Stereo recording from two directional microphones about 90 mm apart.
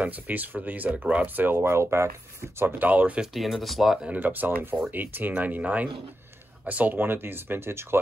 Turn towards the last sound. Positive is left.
turn(degrees=-30)  # may be behind; listen again after turning